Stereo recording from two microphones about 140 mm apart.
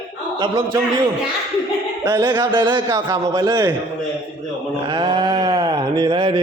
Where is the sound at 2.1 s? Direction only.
30° right (ahead or behind).